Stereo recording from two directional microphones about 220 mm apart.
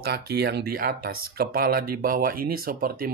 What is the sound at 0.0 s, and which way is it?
Speech, 45° right (ahead or behind).